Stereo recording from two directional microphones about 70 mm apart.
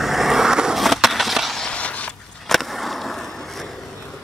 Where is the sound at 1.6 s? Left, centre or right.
Centre.